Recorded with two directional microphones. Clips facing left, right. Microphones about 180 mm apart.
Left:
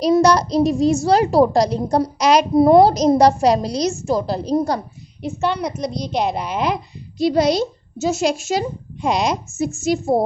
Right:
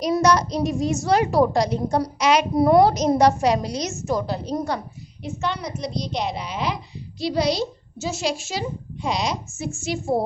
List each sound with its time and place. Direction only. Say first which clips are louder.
0.0 s a child's voice: left 5 dB; 35° left (ahead or behind)
2.6 s a woman's voice: left 5 dB; 25° left (ahead or behind)
5.5 s a woman's voice: left 6 dB; 60° left (ahead or behind)
5.7 s a woman's voice: left 5 dB; 45° left (ahead or behind)